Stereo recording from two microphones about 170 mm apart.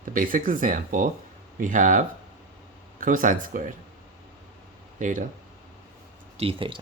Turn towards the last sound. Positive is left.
turn(degrees=-35)  # may be behind; listen again after turning